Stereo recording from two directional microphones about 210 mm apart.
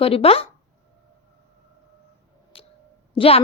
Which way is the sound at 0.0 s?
25° left (ahead or behind).